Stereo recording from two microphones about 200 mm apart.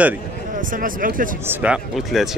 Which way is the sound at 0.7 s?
45° right (ahead or behind).